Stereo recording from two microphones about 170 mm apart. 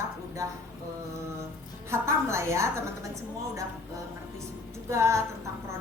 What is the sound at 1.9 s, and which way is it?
A woman's voice, 15° right (ahead or behind).